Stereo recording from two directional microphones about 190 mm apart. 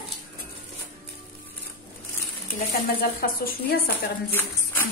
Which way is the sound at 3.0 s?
50° left (ahead or behind).